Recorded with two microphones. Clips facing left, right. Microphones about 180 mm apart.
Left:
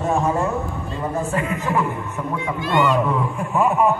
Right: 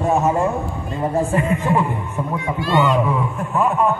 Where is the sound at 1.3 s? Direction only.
30° right (ahead or behind).